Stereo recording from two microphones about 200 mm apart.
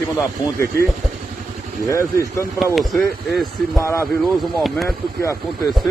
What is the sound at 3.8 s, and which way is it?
Speech, 15° left (ahead or behind).